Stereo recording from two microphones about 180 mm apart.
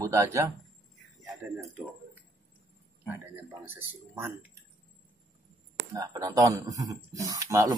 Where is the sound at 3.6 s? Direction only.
10° right (ahead or behind).